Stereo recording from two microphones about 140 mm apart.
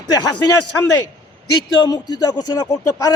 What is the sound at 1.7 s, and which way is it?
A man's voice, 30° left (ahead or behind).